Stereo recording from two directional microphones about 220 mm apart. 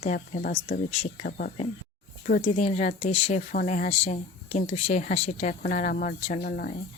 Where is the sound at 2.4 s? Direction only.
25° left (ahead or behind).